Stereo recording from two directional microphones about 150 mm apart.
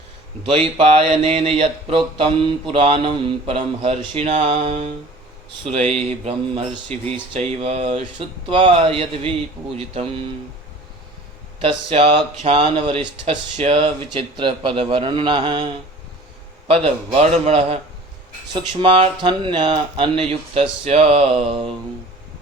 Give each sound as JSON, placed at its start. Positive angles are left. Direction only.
{"t": 0.4, "sound": "mantra", "side_deg": -40}
{"t": 6.0, "sound": "mantra", "side_deg": -45}
{"t": 11.6, "sound": "mantra", "side_deg": -40}